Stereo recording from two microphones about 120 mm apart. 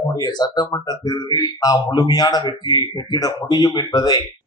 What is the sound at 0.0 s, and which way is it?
A man's voice, 30° left (ahead or behind).